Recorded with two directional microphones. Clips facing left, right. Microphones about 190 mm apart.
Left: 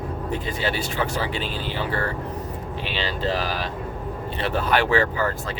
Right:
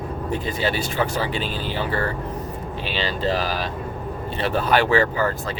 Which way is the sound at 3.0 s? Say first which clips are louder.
Right 2 dB; 40° right (ahead or behind).